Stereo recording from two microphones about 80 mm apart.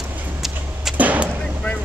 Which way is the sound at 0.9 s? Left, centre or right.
Centre.